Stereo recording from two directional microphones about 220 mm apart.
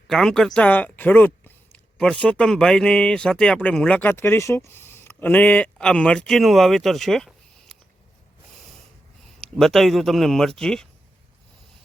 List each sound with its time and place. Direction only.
0.1 s speech: centre (ahead or behind)
9.6 s speech: centre (ahead or behind)